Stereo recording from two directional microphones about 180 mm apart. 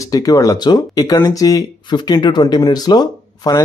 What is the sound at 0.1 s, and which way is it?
Speech, 20° left (ahead or behind).